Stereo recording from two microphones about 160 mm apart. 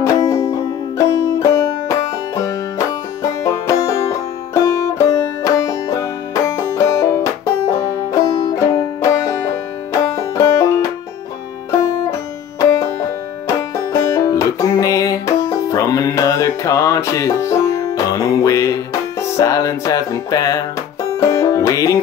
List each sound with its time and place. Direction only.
0.0 s music: 20° left (ahead or behind)
10.1 s banjo: 20° left (ahead or behind)
12.5 s banjo: 20° left (ahead or behind)
13.6 s music: 20° left (ahead or behind)
21.2 s banjo: 20° left (ahead or behind)